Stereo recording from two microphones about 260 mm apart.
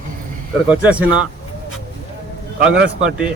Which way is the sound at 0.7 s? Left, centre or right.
Centre.